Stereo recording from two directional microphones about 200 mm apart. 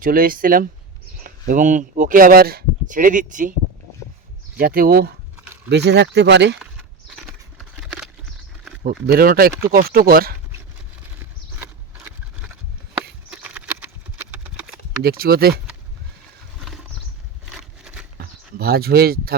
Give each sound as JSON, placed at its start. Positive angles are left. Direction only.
{"t": 0.0, "sound": "speech", "side_deg": -45}
{"t": 4.5, "sound": "speech", "side_deg": -45}
{"t": 9.0, "sound": "speech", "side_deg": -50}
{"t": 11.6, "sound": "a sound", "side_deg": -10}
{"t": 13.3, "sound": "horse", "side_deg": -5}
{"t": 15.0, "sound": "speech", "side_deg": -50}
{"t": 16.6, "sound": "a sound", "side_deg": 0}
{"t": 18.6, "sound": "speech", "side_deg": -50}